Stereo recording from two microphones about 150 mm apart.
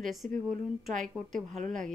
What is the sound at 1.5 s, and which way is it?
Speech, 55° right (ahead or behind).